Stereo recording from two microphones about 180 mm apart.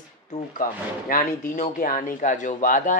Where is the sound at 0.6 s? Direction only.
50° left (ahead or behind).